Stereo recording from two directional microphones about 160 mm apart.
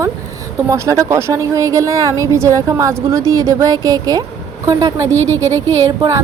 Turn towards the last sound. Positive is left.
turn(degrees=-20)  # may be behind; listen again after turning